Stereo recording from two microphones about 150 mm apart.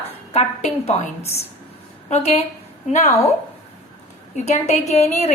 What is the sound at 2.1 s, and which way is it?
Speech, 45° left (ahead or behind).